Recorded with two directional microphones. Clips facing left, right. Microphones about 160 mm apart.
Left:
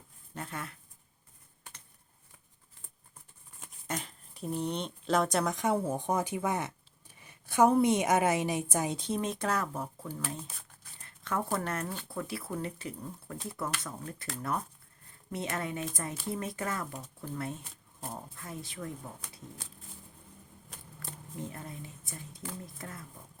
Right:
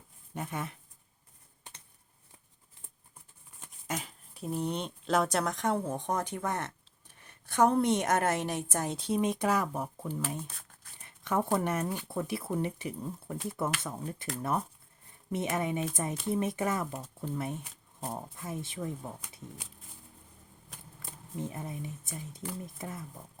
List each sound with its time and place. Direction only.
0.3 s speech: 20° right (ahead or behind)
3.8 s speech: 5° right (ahead or behind)
11.0 s zipper: 20° right (ahead or behind)
11.5 s speech: 15° right (ahead or behind)
21.0 s speech: 20° right (ahead or behind)